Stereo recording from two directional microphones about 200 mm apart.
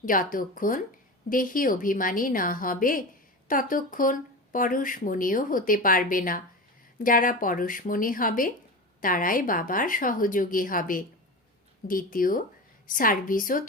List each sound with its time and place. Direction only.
0.0 s speech: 45° left (ahead or behind)